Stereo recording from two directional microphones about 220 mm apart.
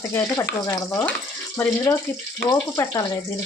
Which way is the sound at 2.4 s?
15° left (ahead or behind).